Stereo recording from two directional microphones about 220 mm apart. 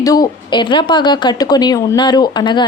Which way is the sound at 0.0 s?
15° left (ahead or behind).